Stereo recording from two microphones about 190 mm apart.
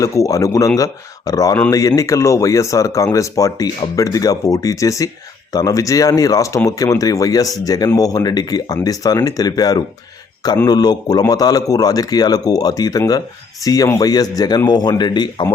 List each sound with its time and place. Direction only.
0.0 s speech: 15° left (ahead or behind)